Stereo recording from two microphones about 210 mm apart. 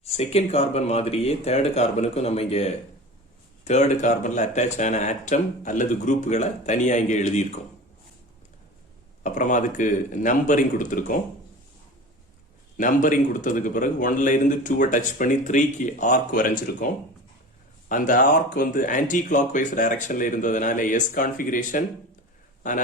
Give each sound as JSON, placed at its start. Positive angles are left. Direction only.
{"t": 0.0, "sound": "a man's voice", "side_deg": 30}
{"t": 9.2, "sound": "a man's voice", "side_deg": 35}
{"t": 12.7, "sound": "a man's voice", "side_deg": 40}